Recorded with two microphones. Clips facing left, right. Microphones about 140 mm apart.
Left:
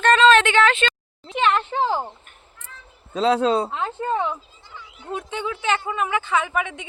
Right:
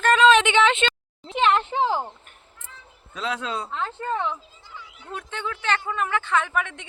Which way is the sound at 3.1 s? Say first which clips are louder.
Left 10 dB; 30° left (ahead or behind).